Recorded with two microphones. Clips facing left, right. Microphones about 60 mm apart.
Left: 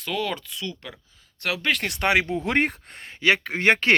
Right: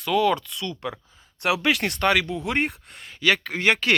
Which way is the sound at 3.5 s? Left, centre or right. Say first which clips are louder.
Left 1 dB; left.